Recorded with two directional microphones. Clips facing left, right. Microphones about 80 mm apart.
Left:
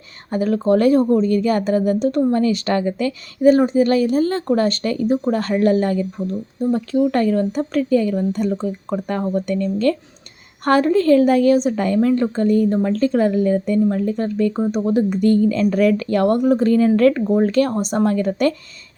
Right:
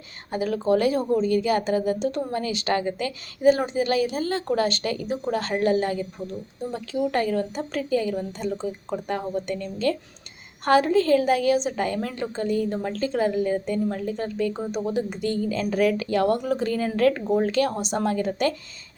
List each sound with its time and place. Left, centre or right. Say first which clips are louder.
0.3 s speech: left 5 dB; left